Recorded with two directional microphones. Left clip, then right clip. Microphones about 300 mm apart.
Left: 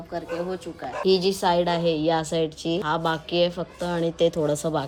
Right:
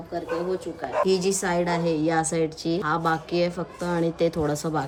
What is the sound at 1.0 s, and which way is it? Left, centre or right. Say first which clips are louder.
A woman's voice: left 7 dB; centre.